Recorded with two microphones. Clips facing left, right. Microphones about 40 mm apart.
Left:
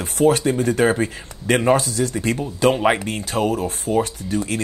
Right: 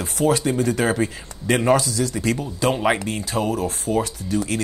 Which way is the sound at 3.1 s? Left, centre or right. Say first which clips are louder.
Left 2 dB; left.